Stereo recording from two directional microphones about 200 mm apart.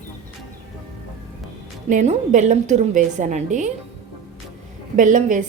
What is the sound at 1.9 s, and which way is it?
A woman's voice, 40° right (ahead or behind).